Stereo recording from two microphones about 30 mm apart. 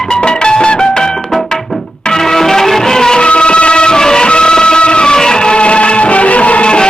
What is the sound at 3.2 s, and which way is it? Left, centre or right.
Music, left.